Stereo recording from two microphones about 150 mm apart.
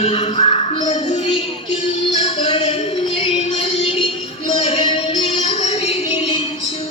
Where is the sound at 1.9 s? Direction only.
40° left (ahead or behind).